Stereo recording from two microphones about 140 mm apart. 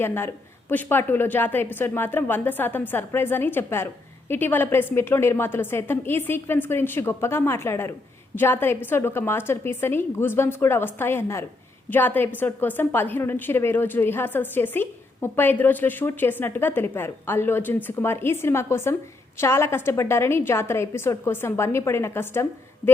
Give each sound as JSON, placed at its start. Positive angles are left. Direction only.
{"t": 0.0, "sound": "a woman's voice", "side_deg": 15}